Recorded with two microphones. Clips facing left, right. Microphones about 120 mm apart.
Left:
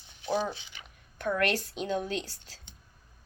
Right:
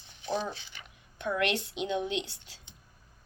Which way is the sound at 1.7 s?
40° left (ahead or behind).